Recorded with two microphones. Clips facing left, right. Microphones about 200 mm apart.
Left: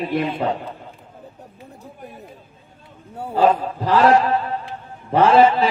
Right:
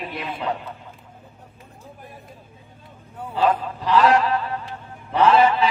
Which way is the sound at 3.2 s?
40° left (ahead or behind).